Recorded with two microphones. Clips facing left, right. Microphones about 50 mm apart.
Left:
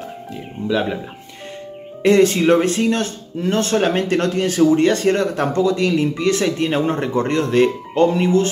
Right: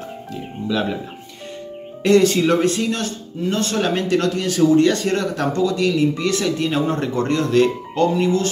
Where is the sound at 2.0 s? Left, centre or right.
Left.